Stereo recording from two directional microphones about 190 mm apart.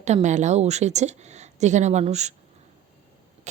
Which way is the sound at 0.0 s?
35° right (ahead or behind).